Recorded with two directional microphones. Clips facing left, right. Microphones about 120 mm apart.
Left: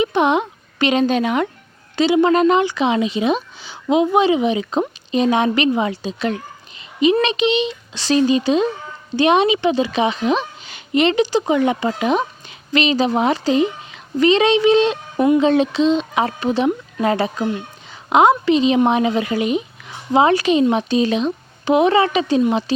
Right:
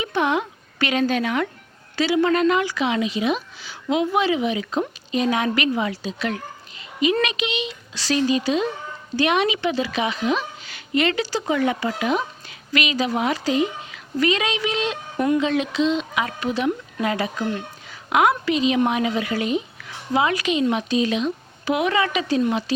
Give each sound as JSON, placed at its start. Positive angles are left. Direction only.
{"t": 0.0, "sound": "a woman's voice", "side_deg": 20}
{"t": 17.4, "sound": "a woman's voice", "side_deg": 20}
{"t": 20.2, "sound": "speech", "side_deg": 35}